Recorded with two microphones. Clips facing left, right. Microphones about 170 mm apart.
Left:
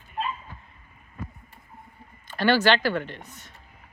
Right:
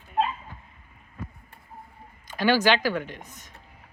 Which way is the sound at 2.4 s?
10° right (ahead or behind).